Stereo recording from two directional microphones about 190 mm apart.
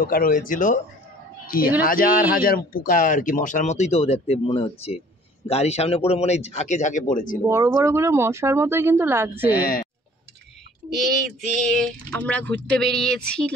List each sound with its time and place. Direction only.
0.0 s speech: 50° left (ahead or behind)
1.9 s speech: 50° left (ahead or behind)
7.4 s speech: 15° right (ahead or behind)
10.9 s speech: centre (ahead or behind)